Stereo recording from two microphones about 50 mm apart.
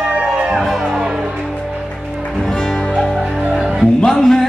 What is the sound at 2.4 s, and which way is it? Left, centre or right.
Music, centre.